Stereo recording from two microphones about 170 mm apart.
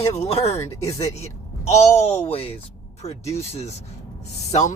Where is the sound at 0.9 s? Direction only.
40° left (ahead or behind).